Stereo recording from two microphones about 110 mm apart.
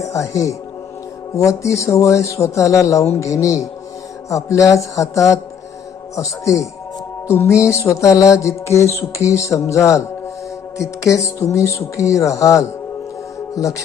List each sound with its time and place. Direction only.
0.0 s a man's voice: 30° left (ahead or behind)
1.4 s music: 30° left (ahead or behind)
4.3 s a man's voice: 30° left (ahead or behind)
6.1 s music: 30° left (ahead or behind)
13.6 s a man's voice: 30° left (ahead or behind)